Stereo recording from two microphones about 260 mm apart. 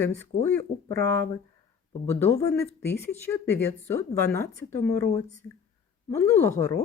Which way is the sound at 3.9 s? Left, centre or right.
Centre.